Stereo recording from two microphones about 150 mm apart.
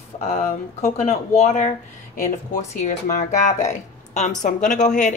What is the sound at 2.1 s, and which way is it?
Speech, 60° left (ahead or behind).